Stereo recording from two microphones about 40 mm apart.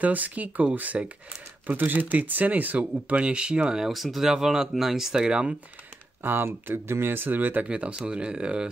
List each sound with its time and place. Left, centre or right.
0.0 s speech: right
3.8 s speech: centre; by 5.6 s right
6.2 s speech: right
7.2 s speech: right
7.6 s speech: right